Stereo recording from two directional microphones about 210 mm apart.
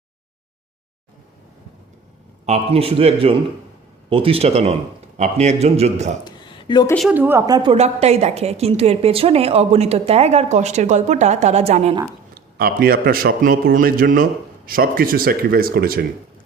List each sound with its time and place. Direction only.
2.5 s a woman's voice: 25° right (ahead or behind)
6.2 s a sound: 20° left (ahead or behind)
7.1 s a woman's voice: 10° right (ahead or behind); by 11.9 s 30° right (ahead or behind)
12.3 s a man's voice: 45° right (ahead or behind)